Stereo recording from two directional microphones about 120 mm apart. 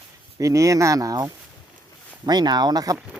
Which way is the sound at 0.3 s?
25° right (ahead or behind).